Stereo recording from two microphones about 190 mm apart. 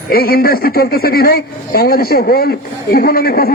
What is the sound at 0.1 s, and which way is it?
Speech, 50° left (ahead or behind).